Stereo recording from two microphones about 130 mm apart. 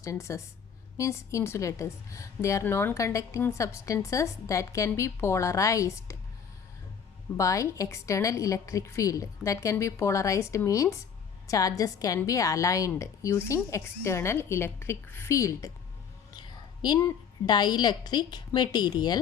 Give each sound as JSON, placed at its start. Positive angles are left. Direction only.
{"t": 0.0, "sound": "a woman's voice", "side_deg": 25}
{"t": 7.3, "sound": "a woman's voice", "side_deg": 25}